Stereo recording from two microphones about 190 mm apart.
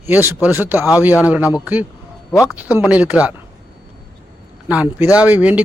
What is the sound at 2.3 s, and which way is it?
Speech, 15° left (ahead or behind).